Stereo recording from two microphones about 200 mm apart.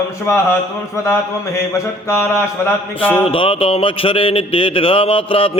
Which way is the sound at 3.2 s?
25° left (ahead or behind).